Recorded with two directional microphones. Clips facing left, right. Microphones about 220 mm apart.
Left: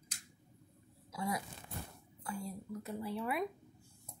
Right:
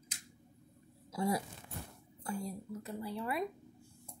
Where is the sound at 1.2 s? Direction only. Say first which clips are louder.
Right 5 dB; 30° right (ahead or behind).